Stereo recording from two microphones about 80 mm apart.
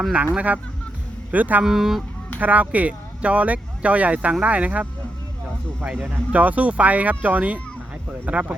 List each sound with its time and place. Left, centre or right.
0.3 s speech: centre
1.6 s speech: centre
2.4 s speech: centre